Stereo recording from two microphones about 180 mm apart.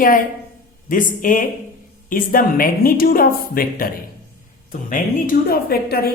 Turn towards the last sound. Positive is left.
turn(degrees=60)  # may be behind; listen again after turning